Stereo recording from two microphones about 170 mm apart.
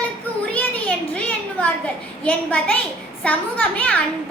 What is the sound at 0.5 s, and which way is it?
Speech, 10° left (ahead or behind).